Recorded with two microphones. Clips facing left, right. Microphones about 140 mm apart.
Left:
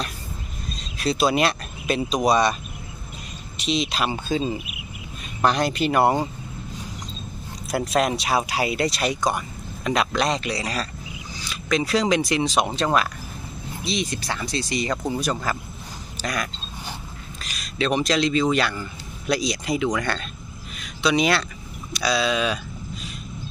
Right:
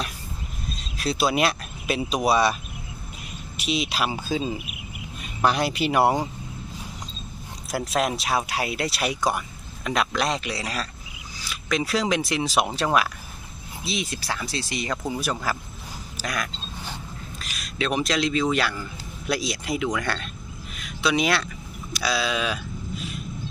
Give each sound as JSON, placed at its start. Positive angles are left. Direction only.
{"t": 0.8, "sound": "speech", "side_deg": 0}
{"t": 3.6, "sound": "speech", "side_deg": -5}
{"t": 7.7, "sound": "speech", "side_deg": 0}
{"t": 9.8, "sound": "a sound", "side_deg": 0}
{"t": 10.2, "sound": "speech", "side_deg": -5}
{"t": 20.7, "sound": "a sound", "side_deg": 0}